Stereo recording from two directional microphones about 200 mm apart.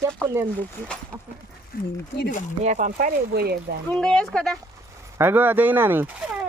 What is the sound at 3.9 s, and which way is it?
Speech, 5° left (ahead or behind).